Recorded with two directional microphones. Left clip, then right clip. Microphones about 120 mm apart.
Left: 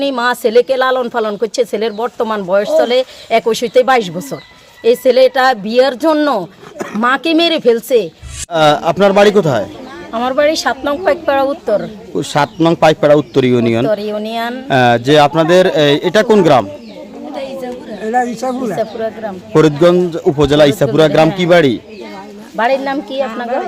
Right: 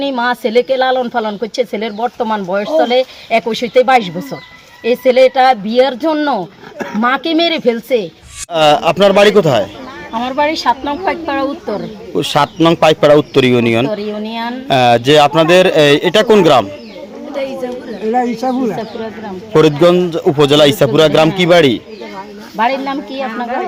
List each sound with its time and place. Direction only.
0.0 s a woman's voice: 40° left (ahead or behind)
8.5 s a man's voice: 15° left (ahead or behind)
10.2 s a woman's voice: 40° left (ahead or behind)
12.1 s a man's voice: 15° left (ahead or behind)
13.8 s a woman's voice: 35° left (ahead or behind)
14.7 s a man's voice: 5° left (ahead or behind)
17.3 s a sound: 10° left (ahead or behind)
18.1 s a woman's voice: 35° left (ahead or behind)
19.5 s a man's voice: 10° left (ahead or behind)
22.5 s a woman's voice: 40° left (ahead or behind)